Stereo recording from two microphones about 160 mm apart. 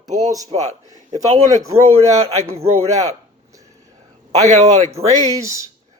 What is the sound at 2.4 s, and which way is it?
Speech, 20° right (ahead or behind).